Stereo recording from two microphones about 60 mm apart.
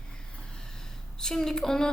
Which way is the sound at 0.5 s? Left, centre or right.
Centre.